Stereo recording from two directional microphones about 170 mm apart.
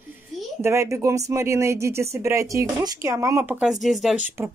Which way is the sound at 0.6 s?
15° right (ahead or behind).